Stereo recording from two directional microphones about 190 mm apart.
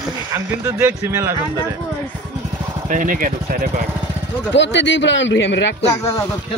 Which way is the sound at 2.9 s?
45° right (ahead or behind).